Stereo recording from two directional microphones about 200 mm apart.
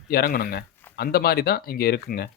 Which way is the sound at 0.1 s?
50° left (ahead or behind).